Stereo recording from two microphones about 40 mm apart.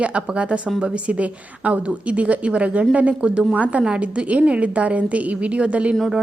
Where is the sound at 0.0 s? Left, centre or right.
Right.